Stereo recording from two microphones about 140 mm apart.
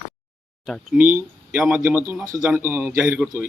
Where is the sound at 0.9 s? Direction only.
10° right (ahead or behind).